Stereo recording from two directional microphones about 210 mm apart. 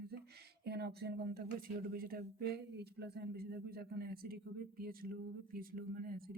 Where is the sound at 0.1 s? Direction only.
50° right (ahead or behind).